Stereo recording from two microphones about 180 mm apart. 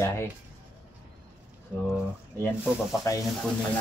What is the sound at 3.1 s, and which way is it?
Speech, 15° left (ahead or behind).